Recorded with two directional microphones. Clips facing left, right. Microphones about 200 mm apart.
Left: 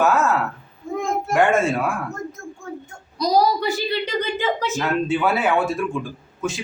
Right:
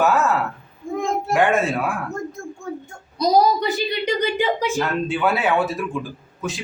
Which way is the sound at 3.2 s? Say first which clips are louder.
Right 2 dB; 20° right (ahead or behind).